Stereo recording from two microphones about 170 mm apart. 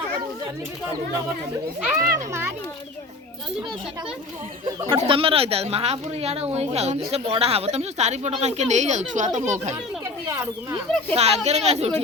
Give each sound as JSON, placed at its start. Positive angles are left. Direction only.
{"t": 2.0, "sound": "a child's voice", "side_deg": -20}
{"t": 4.9, "sound": "speech", "side_deg": -30}
{"t": 10.2, "sound": "speech", "side_deg": -20}
{"t": 11.1, "sound": "speech", "side_deg": -40}